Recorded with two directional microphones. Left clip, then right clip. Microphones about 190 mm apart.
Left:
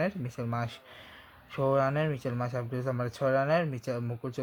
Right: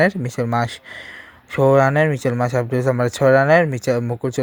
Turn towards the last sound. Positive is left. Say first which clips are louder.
# right 15 dB
turn(degrees=-40)  # may be behind; listen again after turning